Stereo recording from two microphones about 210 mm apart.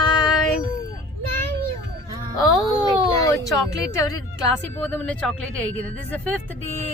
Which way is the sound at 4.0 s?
15° left (ahead or behind).